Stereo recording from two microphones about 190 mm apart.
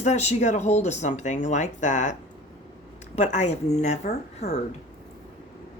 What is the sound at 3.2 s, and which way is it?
Speech, 40° left (ahead or behind).